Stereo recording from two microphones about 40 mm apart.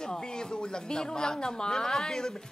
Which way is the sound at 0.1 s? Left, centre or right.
Centre.